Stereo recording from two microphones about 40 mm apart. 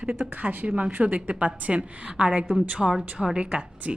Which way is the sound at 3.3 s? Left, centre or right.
Right.